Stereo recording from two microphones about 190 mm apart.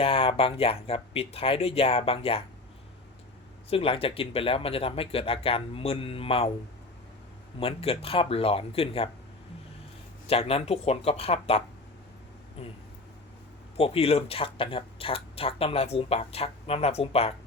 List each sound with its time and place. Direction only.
0.0 s speech: 30° left (ahead or behind)
3.7 s speech: 30° left (ahead or behind)
7.6 s speech: 30° left (ahead or behind)
10.2 s speech: 30° left (ahead or behind)
13.7 s speech: 30° left (ahead or behind)